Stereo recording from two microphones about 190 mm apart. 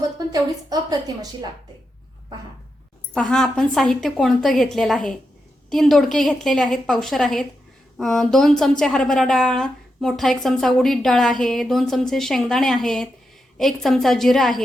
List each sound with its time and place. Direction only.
0.3 s a woman's voice: 20° right (ahead or behind)
3.2 s speech: centre (ahead or behind)